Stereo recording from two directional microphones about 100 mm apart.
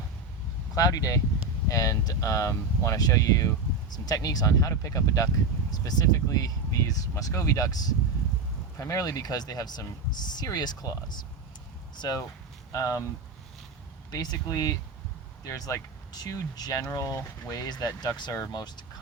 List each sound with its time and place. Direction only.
0.8 s speech: 35° left (ahead or behind)
11.9 s speech: 40° left (ahead or behind)
14.1 s speech: 40° left (ahead or behind)